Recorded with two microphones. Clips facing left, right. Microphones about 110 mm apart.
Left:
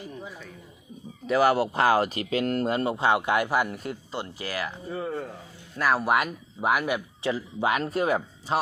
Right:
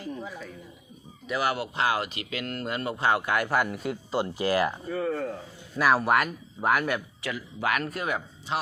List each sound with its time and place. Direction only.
1.3 s speech: 35° left (ahead or behind); by 3.5 s 20° left (ahead or behind)
3.5 s speech: 5° left (ahead or behind)
3.8 s speech: 20° right (ahead or behind)
4.9 s speech: 20° left (ahead or behind)
5.7 s speech: 5° right (ahead or behind); by 7.0 s 10° left (ahead or behind)
7.2 s speech: 25° left (ahead or behind)